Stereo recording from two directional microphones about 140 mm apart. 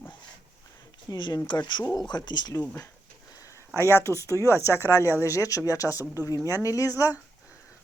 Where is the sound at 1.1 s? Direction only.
30° left (ahead or behind).